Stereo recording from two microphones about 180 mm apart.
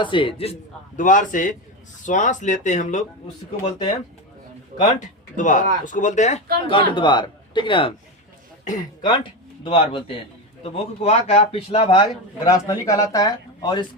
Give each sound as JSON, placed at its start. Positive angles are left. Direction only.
{"t": 0.0, "sound": "speech", "side_deg": 25}
{"t": 0.9, "sound": "speech", "side_deg": 45}
{"t": 4.8, "sound": "speech", "side_deg": 45}
{"t": 12.5, "sound": "speech", "side_deg": 20}